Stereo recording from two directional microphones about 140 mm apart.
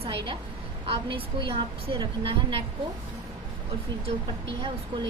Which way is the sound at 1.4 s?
40° right (ahead or behind).